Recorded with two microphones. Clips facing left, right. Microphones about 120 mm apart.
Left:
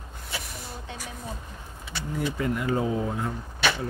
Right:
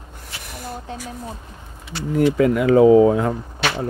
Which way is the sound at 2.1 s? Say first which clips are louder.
Right 12 dB; 85° right.